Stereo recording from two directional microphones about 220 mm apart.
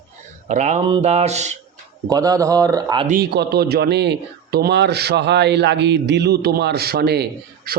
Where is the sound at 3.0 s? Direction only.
40° right (ahead or behind).